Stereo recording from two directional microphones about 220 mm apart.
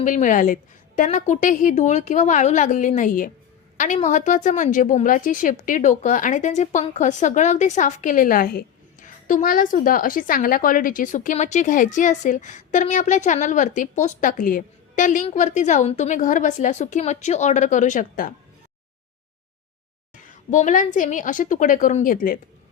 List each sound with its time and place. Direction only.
0.0 s a woman's voice: 35° left (ahead or behind)
20.2 s a woman's voice: 35° left (ahead or behind)